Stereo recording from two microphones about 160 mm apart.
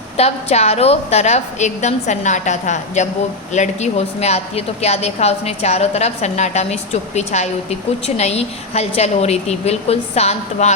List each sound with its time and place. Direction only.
0.2 s a woman's voice: 40° left (ahead or behind)